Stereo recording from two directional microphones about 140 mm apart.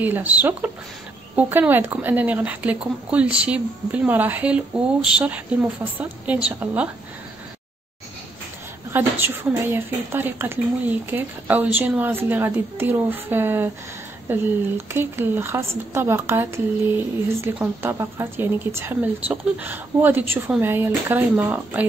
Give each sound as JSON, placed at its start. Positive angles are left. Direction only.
{"t": 0.0, "sound": "speech", "side_deg": -10}
{"t": 8.9, "sound": "speech", "side_deg": -15}